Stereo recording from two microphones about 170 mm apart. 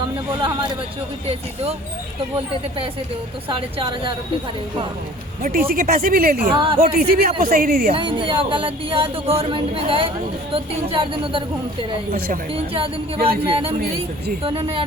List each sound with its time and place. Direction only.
0.3 s a woman's voice: 25° right (ahead or behind)
3.5 s a woman's voice: 30° right (ahead or behind)
5.4 s a woman's voice: 60° right (ahead or behind)
6.5 s a woman's voice: 30° right (ahead or behind)
6.7 s a woman's voice: 60° right (ahead or behind)
7.9 s speech: 30° right (ahead or behind)
13.5 s speech: 35° right (ahead or behind)